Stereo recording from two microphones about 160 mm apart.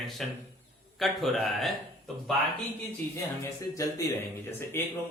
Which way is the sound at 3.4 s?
20° left (ahead or behind).